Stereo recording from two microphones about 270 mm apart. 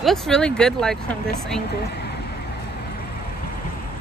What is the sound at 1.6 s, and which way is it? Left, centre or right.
Speech, left.